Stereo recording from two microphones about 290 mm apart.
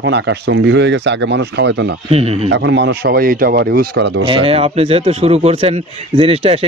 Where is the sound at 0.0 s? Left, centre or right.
Right.